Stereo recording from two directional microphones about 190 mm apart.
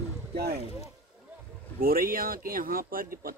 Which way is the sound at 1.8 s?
50° right (ahead or behind).